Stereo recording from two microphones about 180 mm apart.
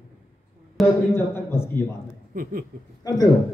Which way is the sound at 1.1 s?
10° left (ahead or behind).